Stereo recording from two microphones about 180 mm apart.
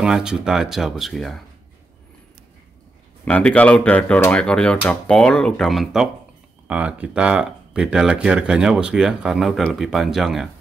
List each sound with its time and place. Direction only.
0.0 s speech: 5° right (ahead or behind)
3.3 s speech: 5° left (ahead or behind)